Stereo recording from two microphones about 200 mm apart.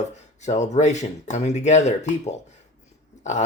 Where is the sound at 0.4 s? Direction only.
35° left (ahead or behind).